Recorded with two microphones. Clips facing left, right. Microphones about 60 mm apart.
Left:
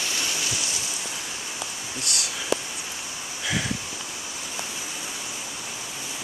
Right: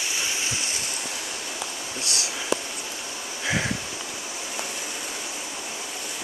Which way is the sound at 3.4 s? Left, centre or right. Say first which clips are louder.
Right 2 dB; right.